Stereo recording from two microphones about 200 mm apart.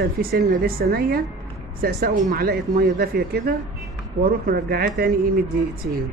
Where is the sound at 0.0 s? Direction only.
50° right (ahead or behind).